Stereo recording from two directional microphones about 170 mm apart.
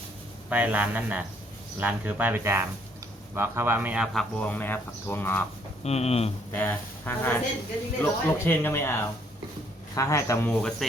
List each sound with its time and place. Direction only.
0.5 s speech: 10° right (ahead or behind); by 5.4 s 10° left (ahead or behind)
5.8 s speech: 40° left (ahead or behind)
6.5 s speech: 10° left (ahead or behind)